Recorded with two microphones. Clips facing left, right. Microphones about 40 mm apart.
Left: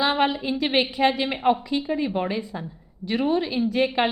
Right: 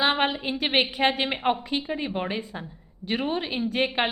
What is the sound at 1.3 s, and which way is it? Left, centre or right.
A woman's voice, right.